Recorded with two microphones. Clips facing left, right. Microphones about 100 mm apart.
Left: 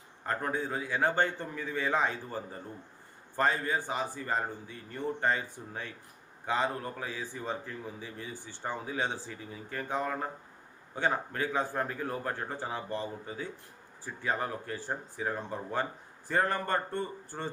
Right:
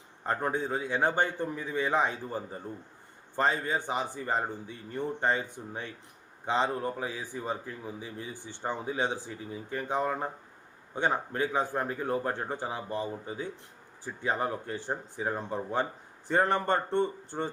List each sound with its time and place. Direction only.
0.3 s a man's voice: 25° right (ahead or behind)